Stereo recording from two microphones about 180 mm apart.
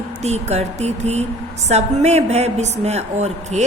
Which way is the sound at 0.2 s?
40° right (ahead or behind).